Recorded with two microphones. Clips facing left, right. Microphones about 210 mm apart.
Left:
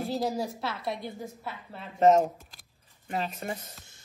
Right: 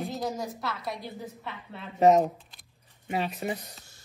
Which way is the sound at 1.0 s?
45° left (ahead or behind).